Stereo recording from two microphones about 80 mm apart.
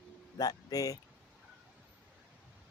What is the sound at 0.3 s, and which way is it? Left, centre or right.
Speech, left.